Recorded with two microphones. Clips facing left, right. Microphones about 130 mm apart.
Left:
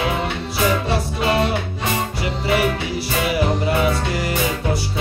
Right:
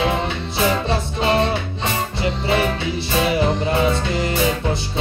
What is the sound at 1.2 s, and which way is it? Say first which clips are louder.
Music: right 2 dB; 25° right (ahead or behind).